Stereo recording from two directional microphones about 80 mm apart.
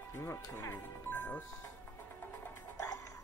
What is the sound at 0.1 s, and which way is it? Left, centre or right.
Speech, left.